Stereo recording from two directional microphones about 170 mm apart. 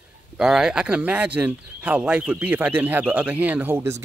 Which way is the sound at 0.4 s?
5° right (ahead or behind).